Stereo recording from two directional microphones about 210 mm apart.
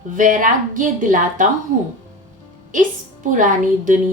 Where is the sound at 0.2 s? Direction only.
40° right (ahead or behind).